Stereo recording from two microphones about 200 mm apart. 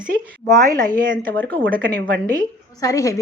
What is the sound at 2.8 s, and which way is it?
Speech, 15° left (ahead or behind).